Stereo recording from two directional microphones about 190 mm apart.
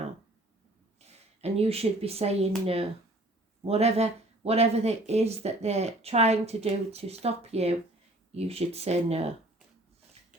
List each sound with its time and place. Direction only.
0.9 s speech: 35° right (ahead or behind)
3.6 s speech: 35° right (ahead or behind)